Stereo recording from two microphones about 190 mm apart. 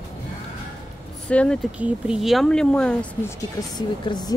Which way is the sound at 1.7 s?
5° right (ahead or behind).